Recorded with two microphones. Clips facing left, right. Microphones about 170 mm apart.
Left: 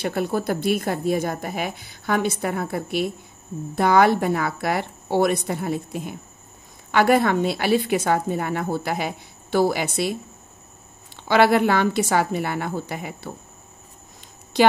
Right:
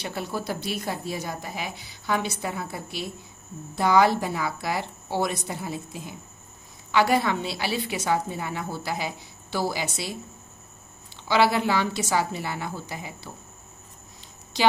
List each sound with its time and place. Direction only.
0.0 s a woman's voice: 50° left (ahead or behind)
11.2 s a woman's voice: 55° left (ahead or behind)